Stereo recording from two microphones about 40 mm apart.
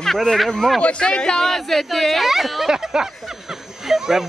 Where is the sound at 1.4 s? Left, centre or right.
Centre.